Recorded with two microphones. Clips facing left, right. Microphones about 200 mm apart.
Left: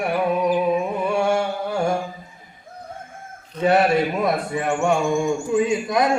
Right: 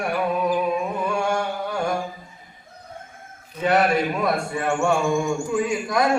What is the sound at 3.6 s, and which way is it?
A man's voice, 25° left (ahead or behind).